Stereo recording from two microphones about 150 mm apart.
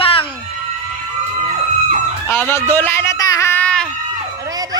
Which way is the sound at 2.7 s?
15° left (ahead or behind).